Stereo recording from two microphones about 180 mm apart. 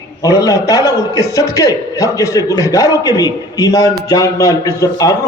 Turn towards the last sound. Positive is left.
turn(degrees=20)  # may be behind; listen again after turning